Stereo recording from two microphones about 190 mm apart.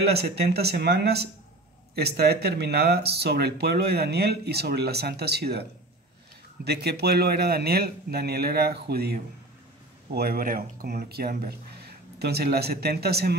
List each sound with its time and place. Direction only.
0.0 s speech: 60° right (ahead or behind)